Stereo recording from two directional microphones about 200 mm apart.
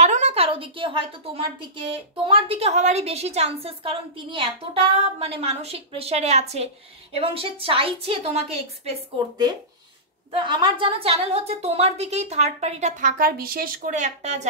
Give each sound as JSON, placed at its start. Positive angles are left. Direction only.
{"t": 0.0, "sound": "a woman's voice", "side_deg": -35}
{"t": 10.3, "sound": "a woman's voice", "side_deg": -25}